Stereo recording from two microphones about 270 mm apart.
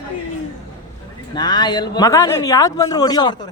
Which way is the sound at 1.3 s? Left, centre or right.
Centre.